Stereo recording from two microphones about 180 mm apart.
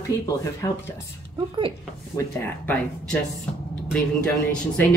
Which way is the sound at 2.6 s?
5° left (ahead or behind).